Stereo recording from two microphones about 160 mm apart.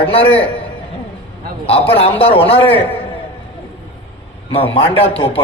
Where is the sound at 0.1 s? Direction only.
35° left (ahead or behind).